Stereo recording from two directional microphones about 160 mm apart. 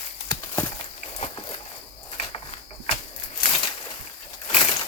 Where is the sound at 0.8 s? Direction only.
45° left (ahead or behind).